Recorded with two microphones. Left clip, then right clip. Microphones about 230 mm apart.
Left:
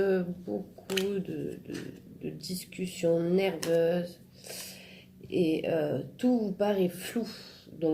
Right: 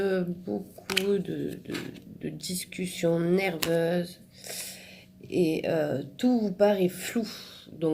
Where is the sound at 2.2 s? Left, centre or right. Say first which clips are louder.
Right 3 dB; right.